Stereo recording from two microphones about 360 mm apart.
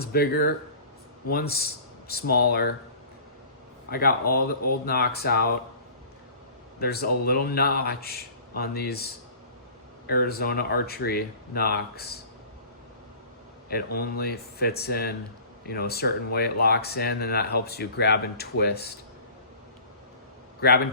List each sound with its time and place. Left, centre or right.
0.0 s speech: left
3.8 s speech: left
6.7 s speech: left
10.1 s speech: left
13.7 s speech: left